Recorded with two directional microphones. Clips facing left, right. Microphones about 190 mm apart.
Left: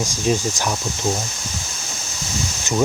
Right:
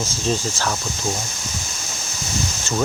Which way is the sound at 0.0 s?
15° left (ahead or behind).